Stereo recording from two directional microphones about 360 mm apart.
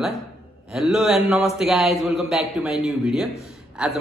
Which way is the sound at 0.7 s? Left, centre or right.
Centre.